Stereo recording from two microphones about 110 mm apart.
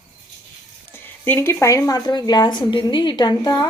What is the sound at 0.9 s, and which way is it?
Speech, 20° left (ahead or behind).